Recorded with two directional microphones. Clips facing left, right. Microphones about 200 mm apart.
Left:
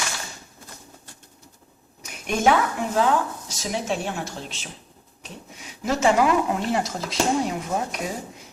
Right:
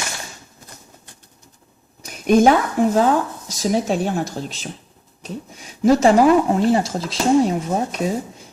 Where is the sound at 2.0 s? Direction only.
35° right (ahead or behind).